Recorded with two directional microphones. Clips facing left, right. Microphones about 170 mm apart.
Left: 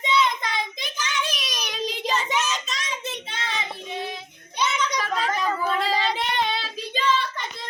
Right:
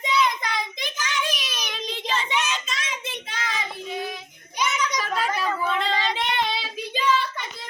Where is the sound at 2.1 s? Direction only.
40° left (ahead or behind).